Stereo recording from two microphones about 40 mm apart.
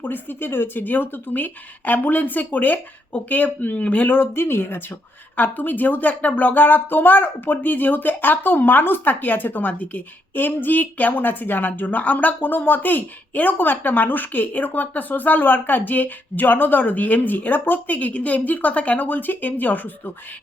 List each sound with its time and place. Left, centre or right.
0.0 s speech: left
4.2 s speech: left
5.4 s speech: left
19.0 s speech: left